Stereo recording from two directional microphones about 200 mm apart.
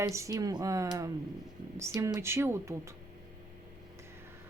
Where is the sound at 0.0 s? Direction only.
15° right (ahead or behind).